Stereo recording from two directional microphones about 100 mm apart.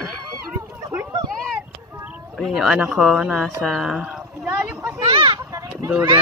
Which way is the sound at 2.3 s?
Centre (ahead or behind).